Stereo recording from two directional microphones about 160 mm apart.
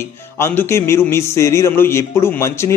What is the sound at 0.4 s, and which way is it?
A man's voice, 15° left (ahead or behind).